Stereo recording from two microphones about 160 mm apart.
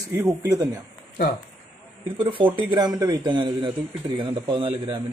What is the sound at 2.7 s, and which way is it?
A man's voice, 25° right (ahead or behind).